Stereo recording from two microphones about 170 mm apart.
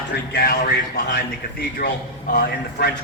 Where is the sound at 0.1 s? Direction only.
75° left (ahead or behind).